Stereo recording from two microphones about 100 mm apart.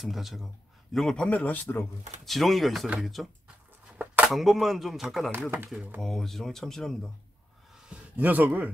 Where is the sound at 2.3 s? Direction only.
Centre (ahead or behind).